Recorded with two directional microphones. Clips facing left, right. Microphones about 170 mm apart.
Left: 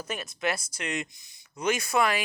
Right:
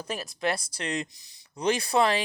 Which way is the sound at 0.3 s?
35° right (ahead or behind).